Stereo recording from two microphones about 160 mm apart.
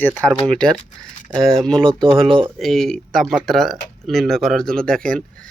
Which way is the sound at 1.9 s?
30° right (ahead or behind).